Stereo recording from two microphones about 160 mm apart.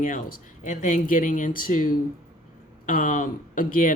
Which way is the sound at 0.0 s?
55° left (ahead or behind).